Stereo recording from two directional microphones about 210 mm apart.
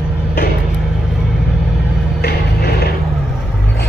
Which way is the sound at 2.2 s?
50° left (ahead or behind).